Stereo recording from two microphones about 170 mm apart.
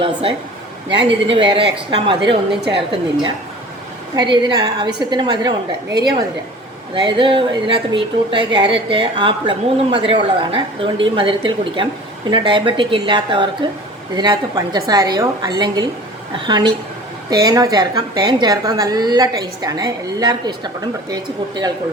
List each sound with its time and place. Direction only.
0.0 s a woman's voice: 30° right (ahead or behind)
8.5 s a woman's voice: 30° right (ahead or behind)